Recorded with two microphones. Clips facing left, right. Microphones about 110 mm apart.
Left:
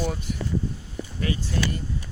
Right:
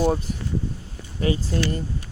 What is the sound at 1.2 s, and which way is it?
Speech, 35° right (ahead or behind).